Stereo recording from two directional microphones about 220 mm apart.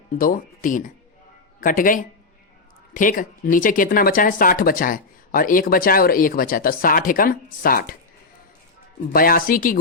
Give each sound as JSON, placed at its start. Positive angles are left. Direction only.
{"t": 0.2, "sound": "speech", "side_deg": 40}
{"t": 9.1, "sound": "speech", "side_deg": 40}